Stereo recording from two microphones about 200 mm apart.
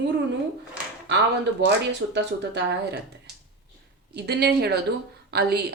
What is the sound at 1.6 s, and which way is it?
Speech, 60° right (ahead or behind).